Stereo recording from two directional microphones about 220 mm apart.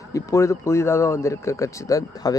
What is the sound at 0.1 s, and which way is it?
Speech, 15° left (ahead or behind).